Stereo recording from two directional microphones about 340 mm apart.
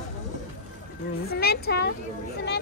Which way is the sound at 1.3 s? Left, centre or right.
Left.